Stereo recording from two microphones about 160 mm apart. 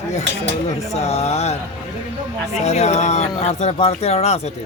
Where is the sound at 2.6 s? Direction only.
45° left (ahead or behind).